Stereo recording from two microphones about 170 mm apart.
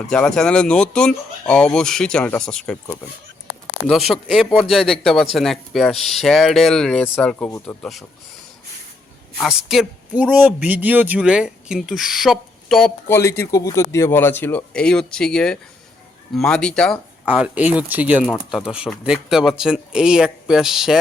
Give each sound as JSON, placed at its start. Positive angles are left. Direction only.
{"t": 0.1, "sound": "speech", "side_deg": 5}
{"t": 3.8, "sound": "speech", "side_deg": 0}
{"t": 9.4, "sound": "speech", "side_deg": -5}
{"t": 13.1, "sound": "speech", "side_deg": 15}
{"t": 17.2, "sound": "speech", "side_deg": -10}